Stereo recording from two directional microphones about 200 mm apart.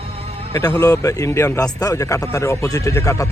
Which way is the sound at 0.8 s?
15° left (ahead or behind).